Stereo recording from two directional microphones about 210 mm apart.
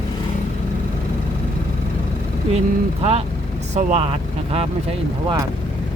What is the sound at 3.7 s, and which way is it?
Speech, 30° right (ahead or behind).